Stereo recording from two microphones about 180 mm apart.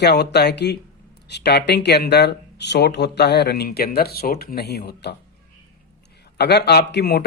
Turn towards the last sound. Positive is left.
turn(degrees=60)  # may be behind; listen again after turning